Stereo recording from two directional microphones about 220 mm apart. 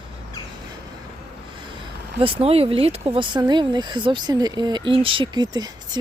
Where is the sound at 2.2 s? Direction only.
25° right (ahead or behind).